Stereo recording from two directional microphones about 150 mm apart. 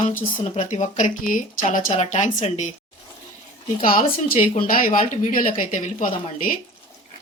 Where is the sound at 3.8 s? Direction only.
70° left (ahead or behind).